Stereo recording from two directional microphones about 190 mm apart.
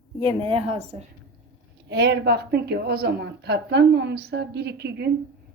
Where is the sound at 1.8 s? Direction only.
65° right (ahead or behind).